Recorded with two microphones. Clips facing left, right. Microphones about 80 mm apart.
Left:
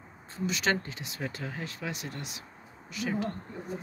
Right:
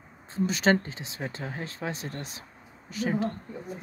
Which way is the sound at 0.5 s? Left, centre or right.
Right.